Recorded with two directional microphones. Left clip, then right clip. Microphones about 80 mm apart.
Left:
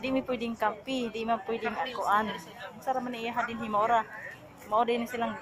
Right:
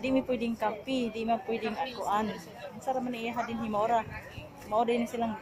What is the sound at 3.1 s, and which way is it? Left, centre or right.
Speech, right.